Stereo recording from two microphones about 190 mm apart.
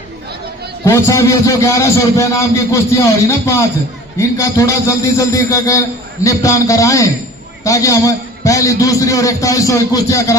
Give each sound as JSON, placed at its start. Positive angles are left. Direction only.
{"t": 0.9, "sound": "a man's voice", "side_deg": 15}